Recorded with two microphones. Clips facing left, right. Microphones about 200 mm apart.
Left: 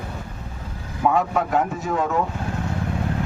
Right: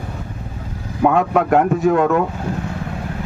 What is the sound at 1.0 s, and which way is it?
Speech, 65° right (ahead or behind).